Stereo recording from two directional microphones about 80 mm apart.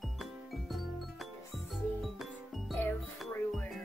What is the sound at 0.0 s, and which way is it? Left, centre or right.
Music, centre.